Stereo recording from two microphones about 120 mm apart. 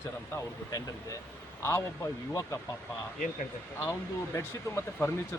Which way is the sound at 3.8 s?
25° left (ahead or behind).